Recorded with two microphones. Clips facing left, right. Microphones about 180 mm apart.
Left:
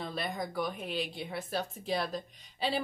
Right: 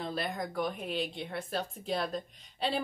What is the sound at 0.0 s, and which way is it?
Speech, centre (ahead or behind).